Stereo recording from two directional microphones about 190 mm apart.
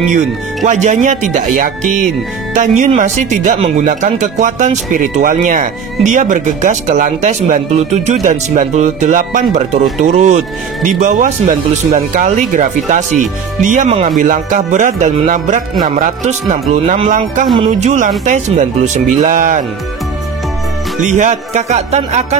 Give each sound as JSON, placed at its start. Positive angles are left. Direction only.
{"t": 0.7, "sound": "speech", "side_deg": -40}
{"t": 21.1, "sound": "speech", "side_deg": -40}